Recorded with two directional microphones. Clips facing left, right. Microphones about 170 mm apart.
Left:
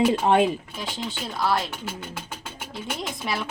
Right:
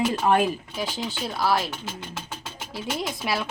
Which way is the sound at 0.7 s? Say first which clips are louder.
Right 2 dB; 5° right (ahead or behind).